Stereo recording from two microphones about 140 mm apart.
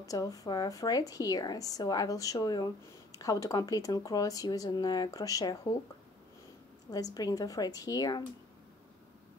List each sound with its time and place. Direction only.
0.0 s a woman's voice: 25° left (ahead or behind)
6.9 s a woman's voice: 25° left (ahead or behind)